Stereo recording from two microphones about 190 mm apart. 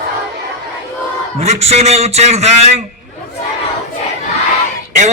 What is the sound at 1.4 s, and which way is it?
A man's voice, 35° right (ahead or behind).